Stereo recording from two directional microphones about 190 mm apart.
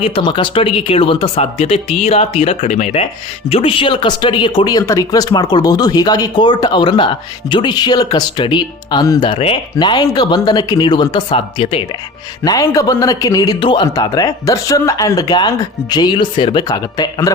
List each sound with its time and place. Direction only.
0.0 s a man's voice: 25° left (ahead or behind)
12.4 s a man's voice: 15° left (ahead or behind)